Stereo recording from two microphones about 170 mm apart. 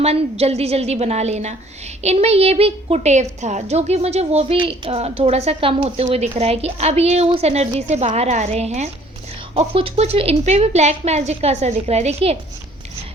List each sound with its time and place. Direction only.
0.0 s a woman's voice: 35° right (ahead or behind)